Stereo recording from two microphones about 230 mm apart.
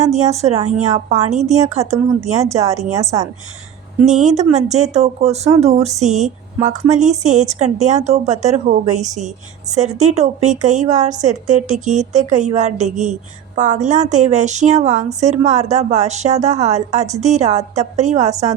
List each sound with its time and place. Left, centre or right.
0.1 s a woman's voice: right
2.8 s a woman's voice: centre
4.0 s a woman's voice: right